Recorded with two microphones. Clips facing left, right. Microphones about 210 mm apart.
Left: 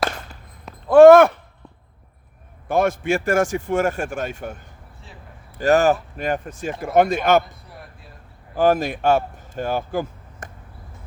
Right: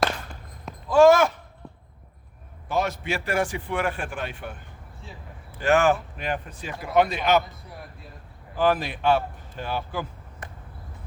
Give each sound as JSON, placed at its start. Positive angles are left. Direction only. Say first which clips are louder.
{"t": 0.9, "sound": "speech", "louder": "left 8 dB", "side_deg": 60}
{"t": 2.6, "sound": "speech", "louder": "left 7 dB", "side_deg": 50}
{"t": 8.5, "sound": "speech", "louder": "left 5 dB", "side_deg": 45}